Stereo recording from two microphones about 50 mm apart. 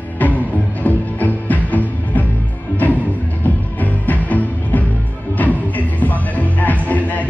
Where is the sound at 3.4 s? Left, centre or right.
Left.